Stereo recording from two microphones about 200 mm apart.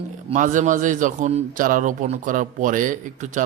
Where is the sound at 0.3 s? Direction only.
40° right (ahead or behind).